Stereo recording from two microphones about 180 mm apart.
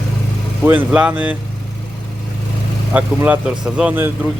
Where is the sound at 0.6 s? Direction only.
10° right (ahead or behind).